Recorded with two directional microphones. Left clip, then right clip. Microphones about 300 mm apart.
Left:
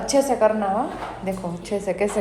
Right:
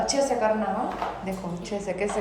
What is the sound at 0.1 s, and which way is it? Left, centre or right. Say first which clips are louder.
A woman's voice: left 9 dB; centre.